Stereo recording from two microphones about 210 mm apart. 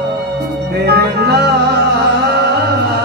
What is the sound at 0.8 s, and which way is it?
Music, 50° right (ahead or behind).